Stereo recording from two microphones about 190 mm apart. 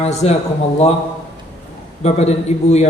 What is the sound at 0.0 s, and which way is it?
Speech, 35° left (ahead or behind).